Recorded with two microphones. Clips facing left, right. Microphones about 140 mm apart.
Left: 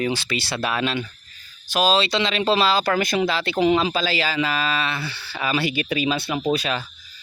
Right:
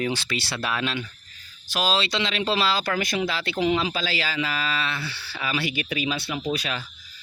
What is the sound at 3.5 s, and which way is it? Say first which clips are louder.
Speech: left 4 dB; 45° left (ahead or behind).